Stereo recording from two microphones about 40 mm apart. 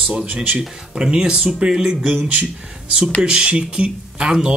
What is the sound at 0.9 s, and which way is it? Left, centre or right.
Speech, centre.